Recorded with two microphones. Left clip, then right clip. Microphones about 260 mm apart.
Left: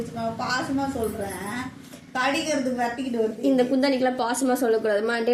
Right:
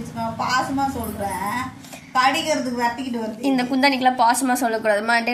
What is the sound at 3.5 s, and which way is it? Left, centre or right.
Speech, centre.